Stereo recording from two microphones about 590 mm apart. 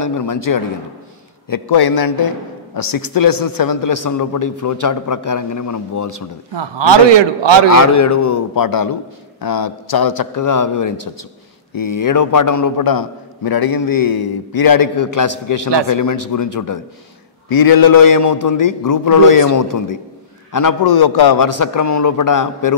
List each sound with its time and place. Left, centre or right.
0.0 s a man's voice: left
6.5 s a man's voice: right
7.7 s a man's voice: left